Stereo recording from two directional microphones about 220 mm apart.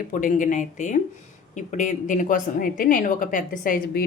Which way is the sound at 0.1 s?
35° left (ahead or behind).